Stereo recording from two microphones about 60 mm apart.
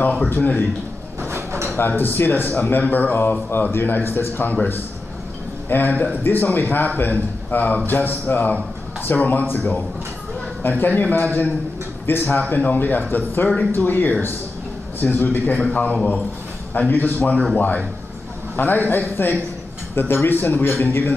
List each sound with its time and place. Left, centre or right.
0.0 s a man's voice: centre
0.3 s a man's voice: left
1.2 s sliding door: right
1.8 s speech: left
5.7 s a man's voice: left